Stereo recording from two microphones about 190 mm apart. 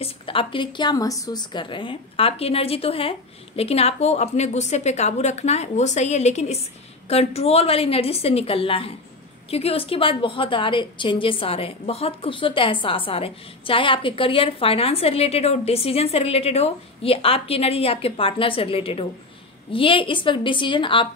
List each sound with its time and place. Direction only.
0.0 s a woman's voice: 30° left (ahead or behind)